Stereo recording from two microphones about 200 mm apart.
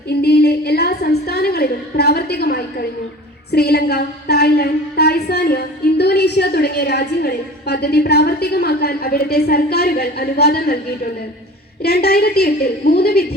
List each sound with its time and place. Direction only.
0.1 s a woman's voice: 55° left (ahead or behind)
11.8 s a woman's voice: 50° left (ahead or behind)